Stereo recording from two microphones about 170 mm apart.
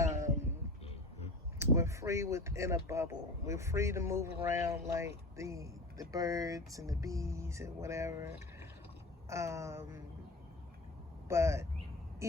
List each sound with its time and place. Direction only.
0.0 s a sound: 15° right (ahead or behind)
1.5 s speech: 15° right (ahead or behind)
11.3 s speech: 15° right (ahead or behind)